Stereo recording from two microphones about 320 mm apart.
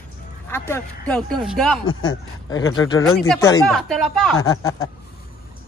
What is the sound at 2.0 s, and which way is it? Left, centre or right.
Speech, centre.